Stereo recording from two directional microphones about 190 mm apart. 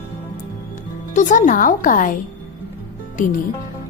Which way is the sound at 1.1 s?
40° left (ahead or behind).